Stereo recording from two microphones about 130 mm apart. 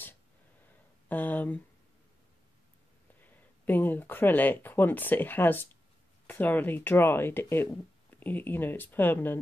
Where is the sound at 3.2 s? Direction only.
15° left (ahead or behind).